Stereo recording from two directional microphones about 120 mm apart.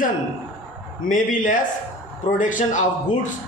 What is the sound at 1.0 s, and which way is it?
A man's voice, 90° left.